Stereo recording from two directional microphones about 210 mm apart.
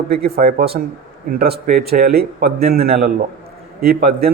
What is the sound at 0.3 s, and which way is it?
A man's voice, 45° right (ahead or behind).